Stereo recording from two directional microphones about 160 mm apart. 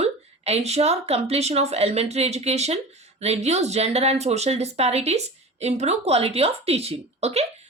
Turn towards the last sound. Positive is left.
turn(degrees=-40)  # may be behind; listen again after turning